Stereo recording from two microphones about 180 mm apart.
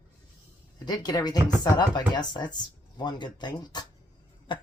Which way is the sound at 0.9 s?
20° left (ahead or behind).